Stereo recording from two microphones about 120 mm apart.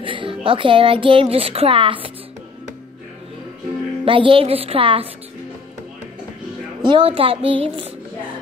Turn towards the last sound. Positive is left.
turn(degrees=-50)  # may be behind; listen again after turning